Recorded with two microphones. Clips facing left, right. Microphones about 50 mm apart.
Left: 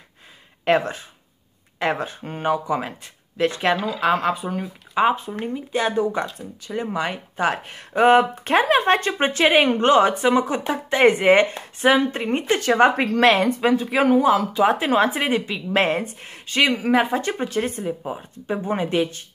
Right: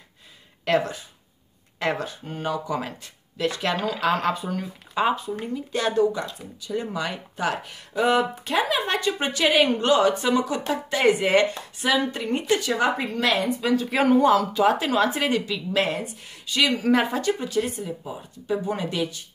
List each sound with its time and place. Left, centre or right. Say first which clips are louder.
0.7 s speech: left 3 dB; left
4.0 s speech: left 2 dB; left
5.1 s speech: left 2 dB; left
5.7 s speech: even; left
12.9 s a woman's voice: left 7 dB; left
13.3 s speech: left 5 dB; left
13.9 s speech: even; centre
14.5 s speech: left 2 dB; left
16.7 s speech: left 2 dB; centre
17.1 s speech: left 1 dB; left